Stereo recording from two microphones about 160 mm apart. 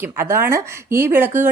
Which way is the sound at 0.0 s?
15° right (ahead or behind).